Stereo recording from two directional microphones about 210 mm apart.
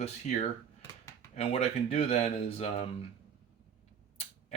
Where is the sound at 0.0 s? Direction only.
35° left (ahead or behind).